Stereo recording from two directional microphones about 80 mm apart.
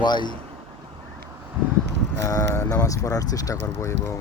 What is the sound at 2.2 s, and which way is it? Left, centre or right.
Speech, left.